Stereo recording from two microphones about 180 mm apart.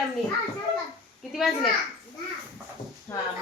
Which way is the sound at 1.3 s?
Centre (ahead or behind).